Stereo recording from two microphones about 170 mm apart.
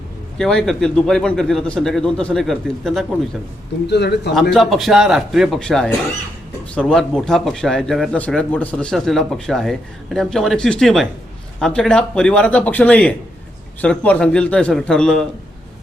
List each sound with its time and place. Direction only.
0.3 s speech: centre (ahead or behind)
3.8 s speech: 80° left
4.5 s speech: centre (ahead or behind)